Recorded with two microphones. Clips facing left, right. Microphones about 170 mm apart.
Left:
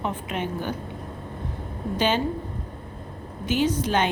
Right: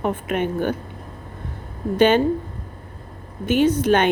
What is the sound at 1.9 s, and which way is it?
Speech, 55° right (ahead or behind).